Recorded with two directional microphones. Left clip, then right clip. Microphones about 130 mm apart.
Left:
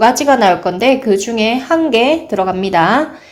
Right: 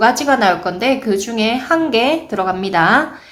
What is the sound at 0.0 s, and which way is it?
A woman's voice, 35° left (ahead or behind).